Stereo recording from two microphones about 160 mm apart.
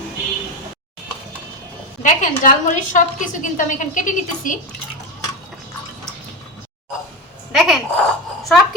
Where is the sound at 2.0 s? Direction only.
50° left (ahead or behind).